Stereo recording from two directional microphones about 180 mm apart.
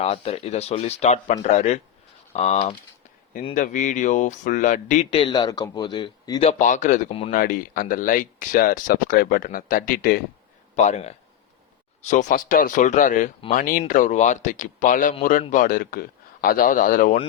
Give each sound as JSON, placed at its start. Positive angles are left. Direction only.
{"t": 0.0, "sound": "speech", "side_deg": 35}
{"t": 5.2, "sound": "speech", "side_deg": 25}
{"t": 6.4, "sound": "speech", "side_deg": 40}
{"t": 10.8, "sound": "speech", "side_deg": 40}